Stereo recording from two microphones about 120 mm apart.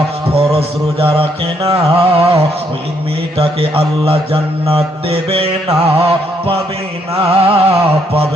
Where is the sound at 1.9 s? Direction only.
50° right (ahead or behind).